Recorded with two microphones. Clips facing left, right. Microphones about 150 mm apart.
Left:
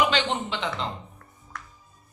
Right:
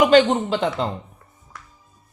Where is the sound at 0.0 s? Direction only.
45° right (ahead or behind).